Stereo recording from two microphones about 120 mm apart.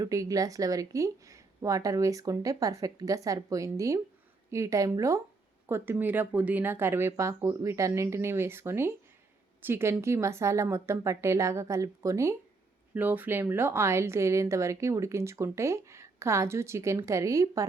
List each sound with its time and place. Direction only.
0.0 s speech: 30° right (ahead or behind)